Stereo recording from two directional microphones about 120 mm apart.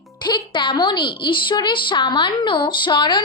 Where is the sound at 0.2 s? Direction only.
40° left (ahead or behind).